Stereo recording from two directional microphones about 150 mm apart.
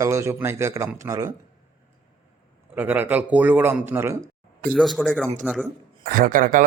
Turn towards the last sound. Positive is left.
turn(degrees=-65)  # may be behind; listen again after turning